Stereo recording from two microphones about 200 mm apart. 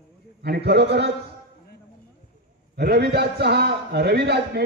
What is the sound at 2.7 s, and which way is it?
A man's voice, 55° right (ahead or behind).